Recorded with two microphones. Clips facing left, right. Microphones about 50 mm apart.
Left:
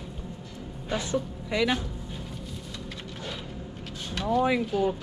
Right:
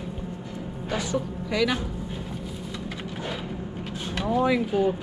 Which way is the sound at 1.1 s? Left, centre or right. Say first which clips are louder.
Right 2 dB; left.